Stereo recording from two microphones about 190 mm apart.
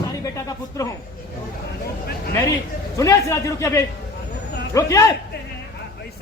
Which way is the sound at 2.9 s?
15° left (ahead or behind).